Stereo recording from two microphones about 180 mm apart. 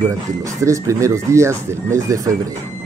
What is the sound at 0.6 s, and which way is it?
Speech, 15° right (ahead or behind).